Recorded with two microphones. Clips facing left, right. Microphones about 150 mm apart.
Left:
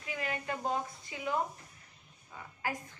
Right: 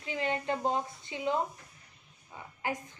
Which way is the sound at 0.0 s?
25° right (ahead or behind).